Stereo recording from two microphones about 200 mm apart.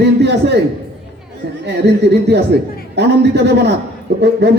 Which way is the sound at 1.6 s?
55° right (ahead or behind).